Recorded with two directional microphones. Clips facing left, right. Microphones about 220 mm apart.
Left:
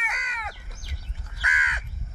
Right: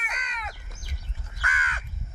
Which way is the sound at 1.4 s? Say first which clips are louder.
Even; 15° left (ahead or behind).